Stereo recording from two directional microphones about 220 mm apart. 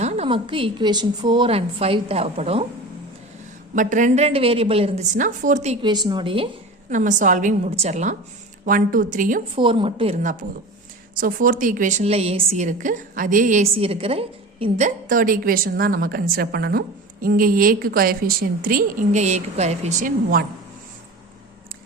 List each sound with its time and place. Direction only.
0.0 s a woman's voice: 30° right (ahead or behind)
3.8 s a woman's voice: 35° right (ahead or behind)
6.9 s a woman's voice: 35° right (ahead or behind)
9.6 s a woman's voice: 25° right (ahead or behind)
11.1 s a woman's voice: 40° right (ahead or behind)